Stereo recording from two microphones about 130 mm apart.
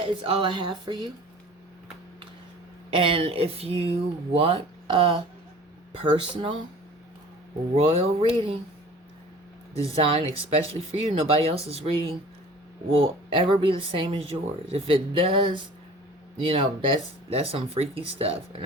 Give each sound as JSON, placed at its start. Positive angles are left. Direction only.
{"t": 0.2, "sound": "a woman's voice", "side_deg": -40}
{"t": 2.9, "sound": "speech", "side_deg": -45}
{"t": 7.9, "sound": "speech", "side_deg": -45}
{"t": 9.7, "sound": "speech", "side_deg": -45}